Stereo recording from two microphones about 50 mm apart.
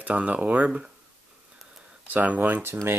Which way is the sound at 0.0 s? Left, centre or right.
Right.